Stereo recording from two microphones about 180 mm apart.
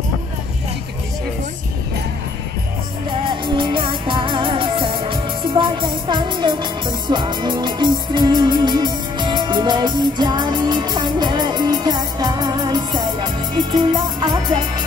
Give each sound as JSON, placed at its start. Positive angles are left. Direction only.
{"t": 3.1, "sound": "music", "side_deg": -25}